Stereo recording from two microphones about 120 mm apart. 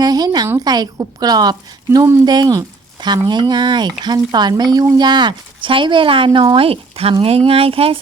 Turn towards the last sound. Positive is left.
turn(degrees=-50)  # may be behind; listen again after turning